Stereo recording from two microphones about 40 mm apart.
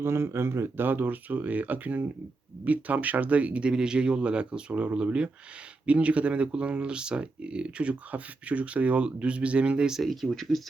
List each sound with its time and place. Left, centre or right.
0.0 s speech: right
10.0 s speech: centre